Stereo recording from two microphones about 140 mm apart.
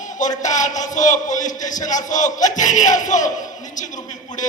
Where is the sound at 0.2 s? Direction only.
60° left (ahead or behind).